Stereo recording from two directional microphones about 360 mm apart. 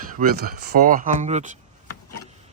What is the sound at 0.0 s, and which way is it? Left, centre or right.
Speech, right.